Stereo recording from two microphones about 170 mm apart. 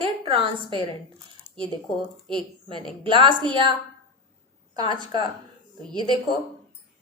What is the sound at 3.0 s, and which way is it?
Speech, 30° right (ahead or behind).